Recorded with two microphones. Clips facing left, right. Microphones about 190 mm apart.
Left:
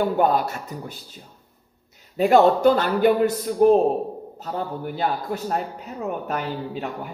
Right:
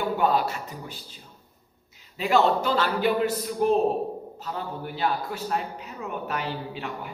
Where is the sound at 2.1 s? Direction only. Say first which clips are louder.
Left 6 dB; 50° left (ahead or behind).